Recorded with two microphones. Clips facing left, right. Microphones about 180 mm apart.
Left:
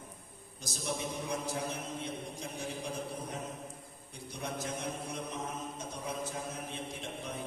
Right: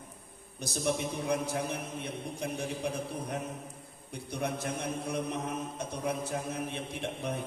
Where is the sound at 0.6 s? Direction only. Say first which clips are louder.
Right 6 dB; 65° right (ahead or behind).